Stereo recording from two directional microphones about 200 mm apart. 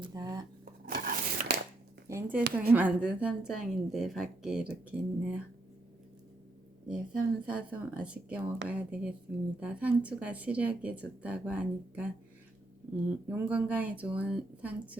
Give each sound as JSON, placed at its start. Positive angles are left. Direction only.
{"t": 0.0, "sound": "speech", "side_deg": -20}
{"t": 0.6, "sound": "a sound", "side_deg": -45}
{"t": 2.0, "sound": "a woman's voice", "side_deg": -15}
{"t": 6.8, "sound": "a woman's voice", "side_deg": -5}
{"t": 13.1, "sound": "speech", "side_deg": -5}